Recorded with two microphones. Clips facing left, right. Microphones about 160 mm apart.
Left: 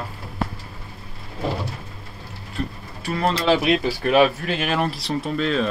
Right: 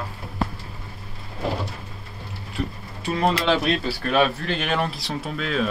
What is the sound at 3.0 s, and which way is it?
Speech, 20° right (ahead or behind).